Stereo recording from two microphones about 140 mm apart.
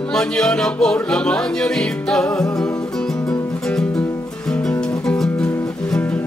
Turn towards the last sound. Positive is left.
turn(degrees=5)  # may be behind; listen again after turning